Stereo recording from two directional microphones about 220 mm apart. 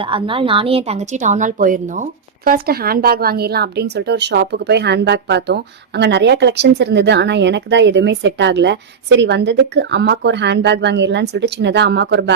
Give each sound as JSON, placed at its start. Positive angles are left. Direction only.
{"t": 0.0, "sound": "a woman's voice", "side_deg": -25}